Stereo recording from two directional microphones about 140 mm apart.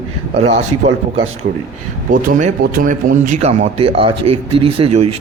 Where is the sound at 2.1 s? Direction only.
85° right.